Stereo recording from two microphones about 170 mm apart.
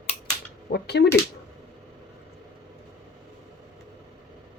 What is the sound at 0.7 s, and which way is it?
Speech, 75° left (ahead or behind).